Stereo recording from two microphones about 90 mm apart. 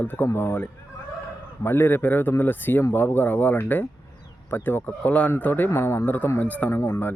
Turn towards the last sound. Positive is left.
turn(degrees=30)  # may be behind; listen again after turning